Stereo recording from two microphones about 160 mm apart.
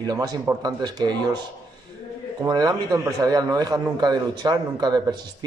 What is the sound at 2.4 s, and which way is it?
A man's voice, 25° right (ahead or behind).